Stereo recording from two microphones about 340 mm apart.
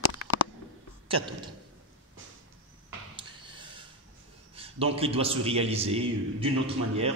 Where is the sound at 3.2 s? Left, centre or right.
Centre.